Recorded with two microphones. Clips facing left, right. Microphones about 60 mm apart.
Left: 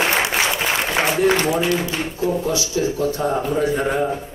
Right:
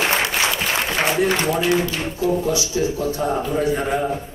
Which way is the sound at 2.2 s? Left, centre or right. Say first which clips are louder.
Right 1 dB; left.